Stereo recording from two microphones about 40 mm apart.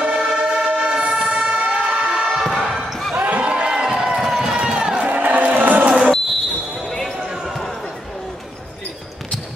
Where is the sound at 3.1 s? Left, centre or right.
Right.